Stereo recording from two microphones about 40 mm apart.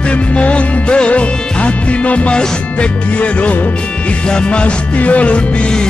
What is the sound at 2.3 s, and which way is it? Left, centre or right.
Music, left.